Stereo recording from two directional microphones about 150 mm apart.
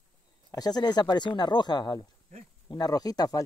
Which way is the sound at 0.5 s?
25° left (ahead or behind).